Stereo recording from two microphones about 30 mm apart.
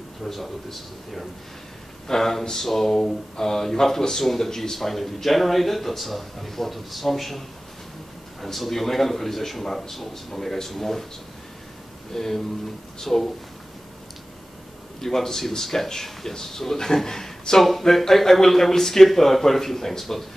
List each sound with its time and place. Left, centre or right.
0.2 s a man's voice: centre
12.1 s a man's voice: centre
15.0 s a man's voice: centre
17.6 s a man's voice: centre